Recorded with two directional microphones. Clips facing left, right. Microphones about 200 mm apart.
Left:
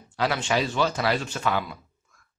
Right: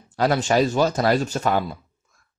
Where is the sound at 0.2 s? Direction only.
45° right (ahead or behind).